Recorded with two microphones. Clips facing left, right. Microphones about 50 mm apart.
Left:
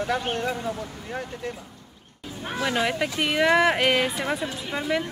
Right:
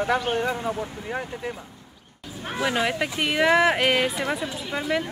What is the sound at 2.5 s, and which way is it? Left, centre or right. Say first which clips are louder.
Speech: right 1 dB; centre.